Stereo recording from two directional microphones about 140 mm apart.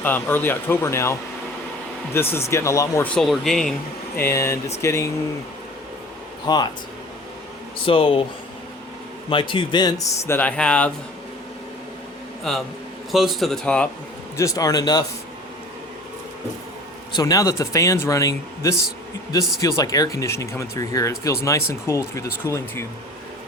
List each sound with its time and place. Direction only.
0.0 s speech: 15° left (ahead or behind)
2.1 s speech: 15° left (ahead or behind)
3.0 s speech: centre (ahead or behind)
4.2 s speech: 20° left (ahead or behind)
6.5 s speech: 30° left (ahead or behind)
7.9 s speech: 40° left (ahead or behind)
9.3 s speech: 35° left (ahead or behind)
10.2 s speech: 15° left (ahead or behind)
13.1 s speech: centre (ahead or behind)
14.3 s speech: 25° left (ahead or behind)
17.1 s speech: 30° left (ahead or behind)